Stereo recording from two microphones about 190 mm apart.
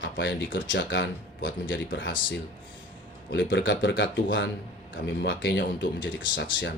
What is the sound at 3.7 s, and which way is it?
Speech, 75° left (ahead or behind).